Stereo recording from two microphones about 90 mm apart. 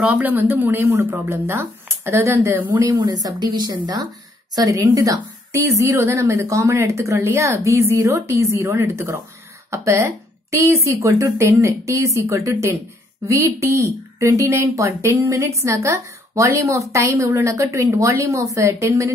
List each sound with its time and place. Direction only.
0.0 s speech: 15° right (ahead or behind)
2.7 s speech: 45° right (ahead or behind)
4.6 s speech: 40° right (ahead or behind)